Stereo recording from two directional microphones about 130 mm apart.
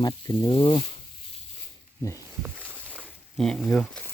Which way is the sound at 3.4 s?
5° left (ahead or behind).